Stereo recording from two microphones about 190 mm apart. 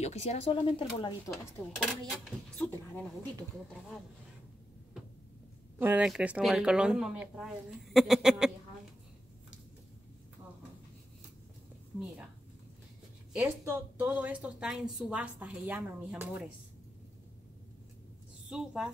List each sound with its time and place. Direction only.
0.0 s speech: 35° left (ahead or behind)
1.4 s speech: centre (ahead or behind)
5.8 s speech: 10° right (ahead or behind)
13.7 s a woman's voice: 10° right (ahead or behind)
18.5 s speech: 5° right (ahead or behind)